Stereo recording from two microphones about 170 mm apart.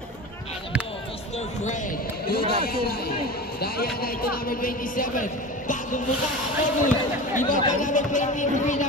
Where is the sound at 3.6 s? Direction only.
65° left (ahead or behind).